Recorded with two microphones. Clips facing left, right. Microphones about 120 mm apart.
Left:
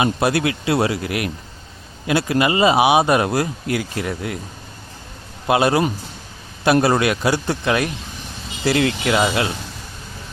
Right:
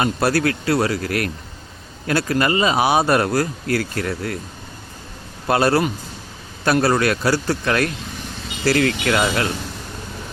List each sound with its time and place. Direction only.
0.0 s speech: 20° left (ahead or behind)
5.5 s a man's voice: 15° left (ahead or behind)
6.8 s a man's voice: 20° left (ahead or behind)